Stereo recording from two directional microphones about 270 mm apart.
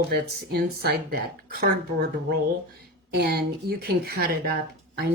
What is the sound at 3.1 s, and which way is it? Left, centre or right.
Speech, right.